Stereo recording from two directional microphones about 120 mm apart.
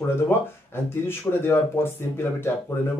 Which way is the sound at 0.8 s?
20° left (ahead or behind).